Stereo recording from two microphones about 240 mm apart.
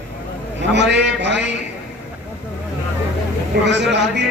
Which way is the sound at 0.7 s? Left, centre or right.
Right.